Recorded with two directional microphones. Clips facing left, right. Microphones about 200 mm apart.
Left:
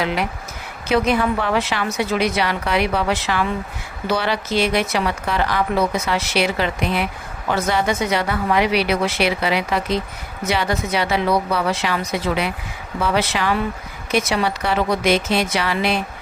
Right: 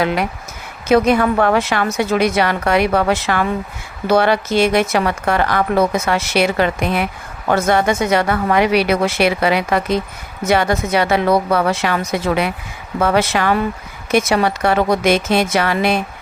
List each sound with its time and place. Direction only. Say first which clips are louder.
0.0 s a woman's voice: right 4 dB; 50° right (ahead or behind)